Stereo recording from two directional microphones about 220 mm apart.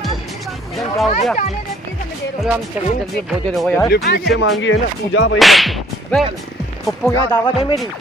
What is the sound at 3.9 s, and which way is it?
Speech, 45° left (ahead or behind).